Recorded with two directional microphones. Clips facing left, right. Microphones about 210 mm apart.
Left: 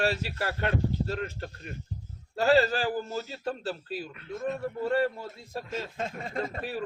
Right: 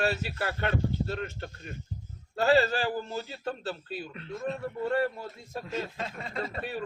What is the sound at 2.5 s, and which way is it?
Speech, 35° left (ahead or behind).